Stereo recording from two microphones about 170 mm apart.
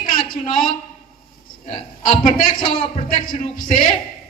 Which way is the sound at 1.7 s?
35° left (ahead or behind).